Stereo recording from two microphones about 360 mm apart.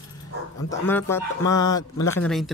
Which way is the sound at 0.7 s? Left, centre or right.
Centre.